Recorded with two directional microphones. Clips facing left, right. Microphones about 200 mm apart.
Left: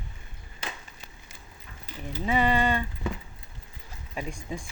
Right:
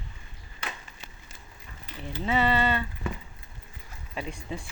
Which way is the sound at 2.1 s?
10° left (ahead or behind).